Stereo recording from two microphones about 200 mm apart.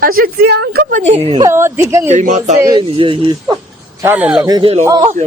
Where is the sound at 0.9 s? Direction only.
35° right (ahead or behind); by 2.0 s 15° right (ahead or behind).